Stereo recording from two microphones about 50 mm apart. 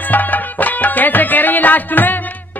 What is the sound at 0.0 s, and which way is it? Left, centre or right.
Music, left.